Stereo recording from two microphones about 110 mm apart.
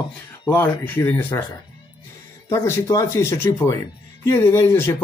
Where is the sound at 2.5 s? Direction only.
25° left (ahead or behind).